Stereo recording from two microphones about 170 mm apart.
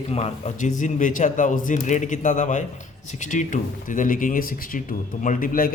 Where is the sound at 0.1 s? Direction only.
40° left (ahead or behind).